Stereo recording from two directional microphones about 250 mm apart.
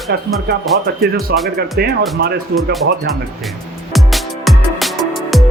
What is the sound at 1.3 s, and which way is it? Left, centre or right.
Speech, right.